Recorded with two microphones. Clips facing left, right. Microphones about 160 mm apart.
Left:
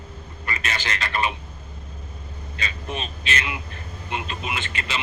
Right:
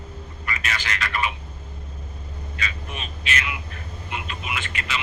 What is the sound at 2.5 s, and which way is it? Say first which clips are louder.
Speech: left 3 dB; 30° left (ahead or behind).